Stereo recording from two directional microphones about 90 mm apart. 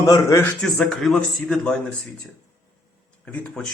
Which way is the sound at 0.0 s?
40° left (ahead or behind).